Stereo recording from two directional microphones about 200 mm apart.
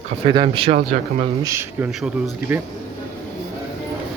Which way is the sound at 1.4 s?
15° right (ahead or behind).